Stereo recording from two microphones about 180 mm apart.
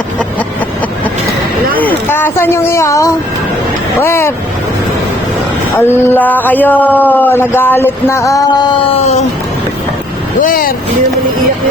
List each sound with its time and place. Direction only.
1.7 s speech: 10° left (ahead or behind)
5.8 s speech: 10° left (ahead or behind)
9.0 s a sound: 35° left (ahead or behind)
10.4 s speech: 50° left (ahead or behind)